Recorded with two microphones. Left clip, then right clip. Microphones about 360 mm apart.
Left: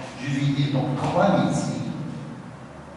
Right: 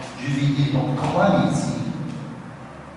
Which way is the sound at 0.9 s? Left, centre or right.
Centre.